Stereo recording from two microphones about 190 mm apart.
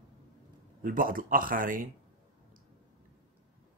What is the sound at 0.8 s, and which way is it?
Speech, 45° right (ahead or behind).